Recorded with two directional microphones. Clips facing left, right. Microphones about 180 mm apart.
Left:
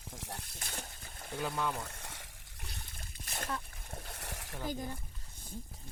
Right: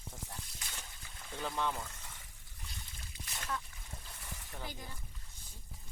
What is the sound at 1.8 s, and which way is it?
Trickle, 80° left.